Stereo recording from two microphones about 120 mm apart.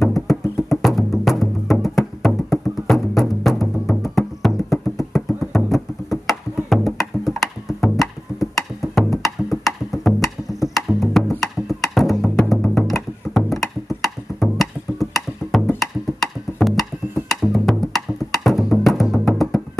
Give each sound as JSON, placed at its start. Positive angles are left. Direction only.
{"t": 0.0, "sound": "music", "side_deg": 0}
{"t": 4.9, "sound": "a sound", "side_deg": 0}
{"t": 5.7, "sound": "music", "side_deg": 0}